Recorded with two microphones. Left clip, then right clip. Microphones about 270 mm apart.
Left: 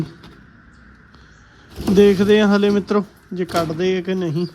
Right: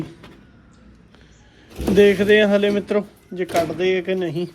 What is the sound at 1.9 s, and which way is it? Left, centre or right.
Speech, centre.